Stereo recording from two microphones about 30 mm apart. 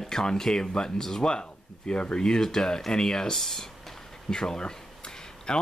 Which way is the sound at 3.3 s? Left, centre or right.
Centre.